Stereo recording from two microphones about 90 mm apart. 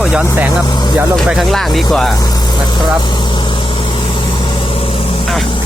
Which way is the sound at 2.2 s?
55° left (ahead or behind).